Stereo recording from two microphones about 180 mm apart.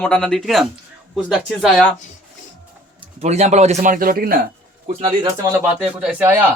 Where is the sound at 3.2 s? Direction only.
40° right (ahead or behind); by 4.4 s 55° right (ahead or behind).